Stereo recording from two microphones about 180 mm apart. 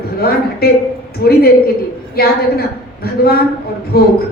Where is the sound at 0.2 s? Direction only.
60° left (ahead or behind).